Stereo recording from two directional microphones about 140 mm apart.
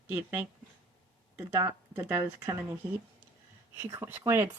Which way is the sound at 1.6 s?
20° right (ahead or behind).